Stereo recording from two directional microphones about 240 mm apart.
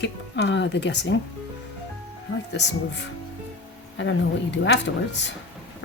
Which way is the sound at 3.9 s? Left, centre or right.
Left.